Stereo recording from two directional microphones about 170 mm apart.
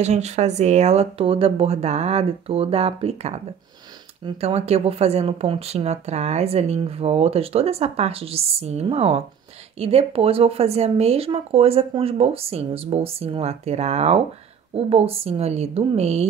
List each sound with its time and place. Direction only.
0.0 s speech: 40° right (ahead or behind)